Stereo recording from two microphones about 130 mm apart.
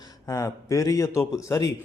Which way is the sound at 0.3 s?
25° left (ahead or behind).